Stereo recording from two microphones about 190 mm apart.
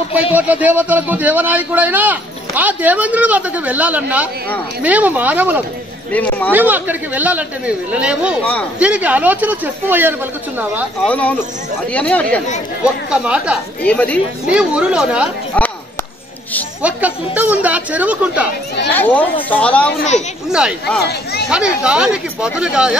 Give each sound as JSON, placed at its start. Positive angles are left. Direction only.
{"t": 0.3, "sound": "a man's voice", "side_deg": -10}
{"t": 6.1, "sound": "speech", "side_deg": 10}
{"t": 6.5, "sound": "a man's voice", "side_deg": -10}
{"t": 11.1, "sound": "speech", "side_deg": 5}
{"t": 12.8, "sound": "speech", "side_deg": -5}
{"t": 13.8, "sound": "speech", "side_deg": 5}
{"t": 14.5, "sound": "speech", "side_deg": -5}
{"t": 16.8, "sound": "a man's voice", "side_deg": -10}
{"t": 18.9, "sound": "speech", "side_deg": 10}
{"t": 20.4, "sound": "speech", "side_deg": -5}
{"t": 21.0, "sound": "speech", "side_deg": 60}
{"t": 21.5, "sound": "speech", "side_deg": -5}